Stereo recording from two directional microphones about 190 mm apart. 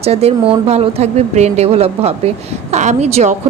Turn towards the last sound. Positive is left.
turn(degrees=-35)  # may be behind; listen again after turning